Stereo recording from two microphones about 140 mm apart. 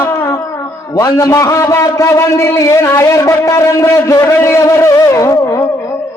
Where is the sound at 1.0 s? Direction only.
25° left (ahead or behind).